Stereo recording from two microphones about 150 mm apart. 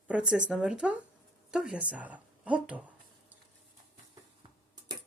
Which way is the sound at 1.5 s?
5° right (ahead or behind).